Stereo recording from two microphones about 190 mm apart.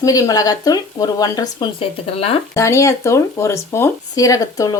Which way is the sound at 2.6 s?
15° left (ahead or behind).